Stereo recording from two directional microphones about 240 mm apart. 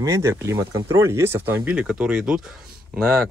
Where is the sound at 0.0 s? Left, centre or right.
Centre.